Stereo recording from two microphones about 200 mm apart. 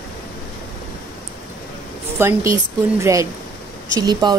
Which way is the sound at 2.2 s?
15° right (ahead or behind).